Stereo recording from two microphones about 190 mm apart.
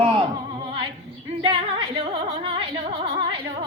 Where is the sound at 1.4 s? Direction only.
30° right (ahead or behind).